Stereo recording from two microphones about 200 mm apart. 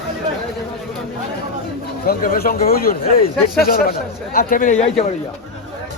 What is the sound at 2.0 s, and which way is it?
A man's voice, 45° left (ahead or behind).